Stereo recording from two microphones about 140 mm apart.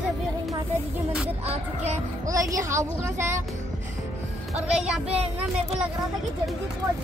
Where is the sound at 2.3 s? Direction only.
25° right (ahead or behind).